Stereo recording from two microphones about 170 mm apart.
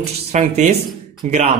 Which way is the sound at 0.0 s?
40° right (ahead or behind).